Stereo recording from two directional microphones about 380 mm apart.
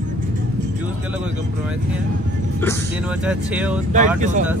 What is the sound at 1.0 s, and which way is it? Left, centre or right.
Speech, centre.